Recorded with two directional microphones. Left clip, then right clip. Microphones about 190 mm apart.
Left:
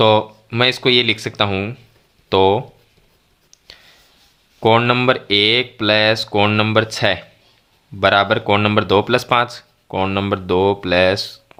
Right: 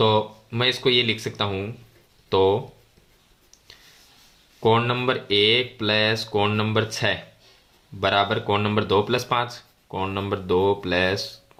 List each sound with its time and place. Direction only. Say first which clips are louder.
0.0 s speech: left 7 dB; 40° left (ahead or behind)
4.6 s speech: left 7 dB; 40° left (ahead or behind)